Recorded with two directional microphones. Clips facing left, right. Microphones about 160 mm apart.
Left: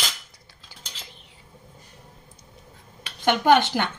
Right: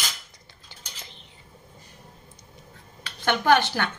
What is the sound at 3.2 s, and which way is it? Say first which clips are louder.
Speech: left 2 dB; 15° left (ahead or behind).